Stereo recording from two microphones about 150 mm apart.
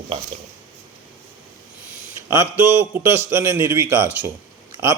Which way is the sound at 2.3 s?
15° right (ahead or behind).